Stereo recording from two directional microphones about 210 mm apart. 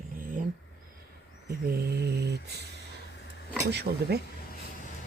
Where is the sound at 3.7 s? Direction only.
50° right (ahead or behind).